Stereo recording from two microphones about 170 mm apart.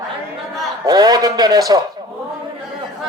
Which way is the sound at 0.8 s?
25° right (ahead or behind).